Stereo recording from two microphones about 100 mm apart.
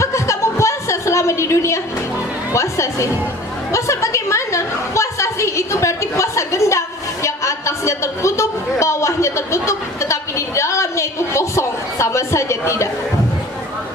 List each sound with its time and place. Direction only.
0.0 s chuckle: 30° left (ahead or behind)
2.5 s a woman's voice: 30° left (ahead or behind)